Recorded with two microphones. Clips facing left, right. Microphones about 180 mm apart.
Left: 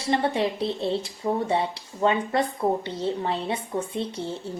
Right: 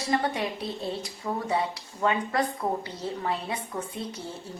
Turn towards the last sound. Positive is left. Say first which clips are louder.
# left 6 dB
turn(degrees=30)  # may be behind; listen again after turning